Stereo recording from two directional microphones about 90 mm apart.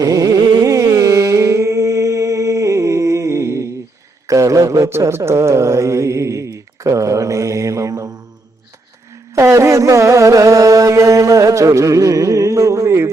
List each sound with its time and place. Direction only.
0.0 s carnatic music: 40° right (ahead or behind)
4.3 s mantra: 35° right (ahead or behind)
9.3 s music: 35° right (ahead or behind)